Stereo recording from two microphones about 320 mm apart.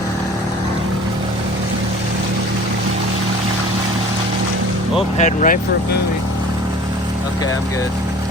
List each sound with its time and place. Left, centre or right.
5.1 s speech: left